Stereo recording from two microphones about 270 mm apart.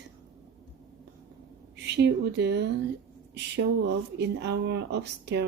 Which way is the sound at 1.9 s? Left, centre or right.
Right.